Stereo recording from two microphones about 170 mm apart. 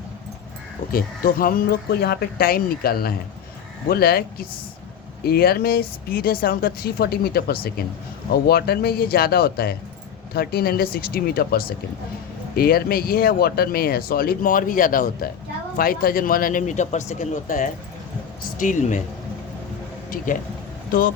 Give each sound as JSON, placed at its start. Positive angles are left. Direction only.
{"t": 0.9, "sound": "speech", "side_deg": 60}